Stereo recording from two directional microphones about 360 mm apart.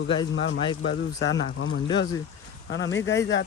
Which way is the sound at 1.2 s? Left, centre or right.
Left.